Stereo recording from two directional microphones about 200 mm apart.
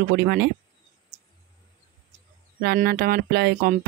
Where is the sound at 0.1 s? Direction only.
55° right (ahead or behind).